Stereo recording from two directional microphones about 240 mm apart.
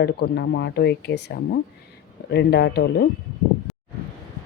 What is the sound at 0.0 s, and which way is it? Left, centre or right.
Speech, left.